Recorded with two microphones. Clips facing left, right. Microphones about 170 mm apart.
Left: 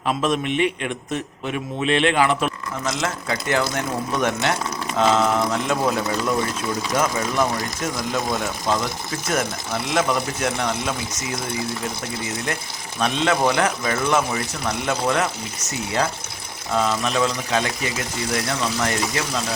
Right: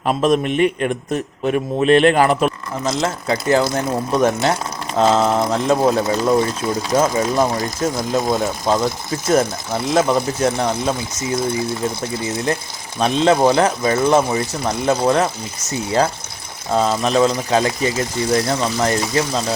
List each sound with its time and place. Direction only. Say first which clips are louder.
0.0 s a man's voice: right 5 dB; 40° right (ahead or behind)
13.0 s a man's voice: right 6 dB; 35° right (ahead or behind)